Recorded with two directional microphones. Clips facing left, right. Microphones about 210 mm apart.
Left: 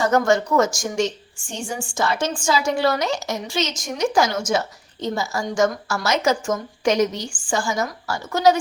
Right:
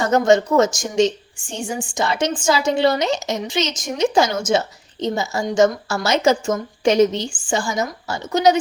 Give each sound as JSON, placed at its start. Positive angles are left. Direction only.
{"t": 0.1, "sound": "a woman's voice", "side_deg": -20}